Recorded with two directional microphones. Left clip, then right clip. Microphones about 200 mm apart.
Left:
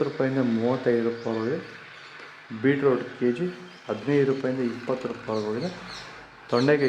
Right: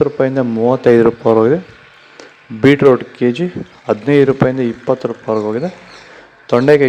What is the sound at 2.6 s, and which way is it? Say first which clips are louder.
A man's voice: right 13 dB; 50° right (ahead or behind).